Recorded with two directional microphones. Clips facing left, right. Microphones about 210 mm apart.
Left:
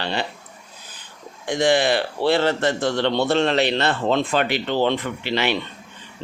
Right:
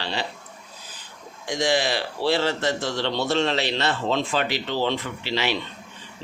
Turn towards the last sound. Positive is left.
turn(degrees=55)  # may be behind; listen again after turning